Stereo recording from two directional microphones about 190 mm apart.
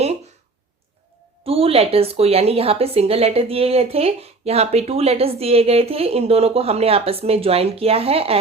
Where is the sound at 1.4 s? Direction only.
30° right (ahead or behind).